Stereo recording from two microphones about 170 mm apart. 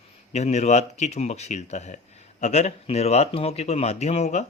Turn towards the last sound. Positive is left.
turn(degrees=40)  # may be behind; listen again after turning